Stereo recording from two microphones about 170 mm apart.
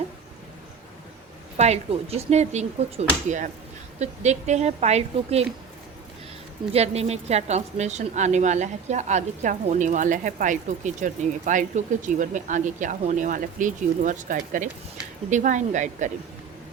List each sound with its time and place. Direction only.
1.5 s a woman's voice: 40° right (ahead or behind)
6.7 s a woman's voice: 35° right (ahead or behind)